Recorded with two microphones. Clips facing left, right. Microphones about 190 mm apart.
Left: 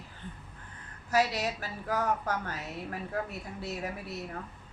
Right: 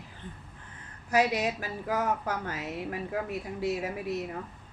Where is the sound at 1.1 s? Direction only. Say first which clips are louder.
Right 2 dB; 15° right (ahead or behind).